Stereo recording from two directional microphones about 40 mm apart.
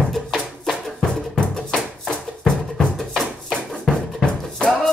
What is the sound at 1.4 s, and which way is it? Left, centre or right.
Music, centre.